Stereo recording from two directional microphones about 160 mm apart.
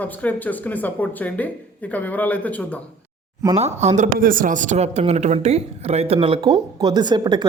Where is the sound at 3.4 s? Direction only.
40° right (ahead or behind).